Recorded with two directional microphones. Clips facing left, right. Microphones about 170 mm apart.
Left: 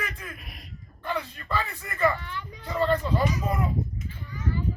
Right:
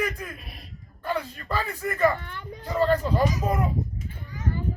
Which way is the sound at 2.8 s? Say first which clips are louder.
Right 2 dB; 10° right (ahead or behind).